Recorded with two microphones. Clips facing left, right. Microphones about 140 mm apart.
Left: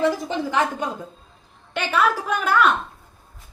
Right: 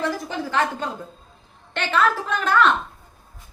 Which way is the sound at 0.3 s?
15° left (ahead or behind).